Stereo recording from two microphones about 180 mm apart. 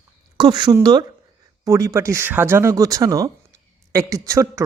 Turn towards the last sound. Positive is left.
turn(degrees=-20)  # may be behind; listen again after turning